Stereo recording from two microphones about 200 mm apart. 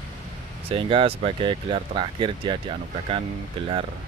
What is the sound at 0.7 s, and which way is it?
Speech, 25° right (ahead or behind).